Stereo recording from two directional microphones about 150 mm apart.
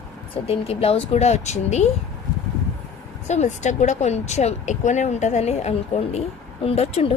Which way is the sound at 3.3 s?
50° left (ahead or behind).